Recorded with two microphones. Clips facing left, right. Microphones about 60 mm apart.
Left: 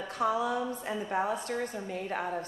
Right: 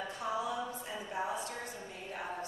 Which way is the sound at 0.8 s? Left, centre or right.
Left.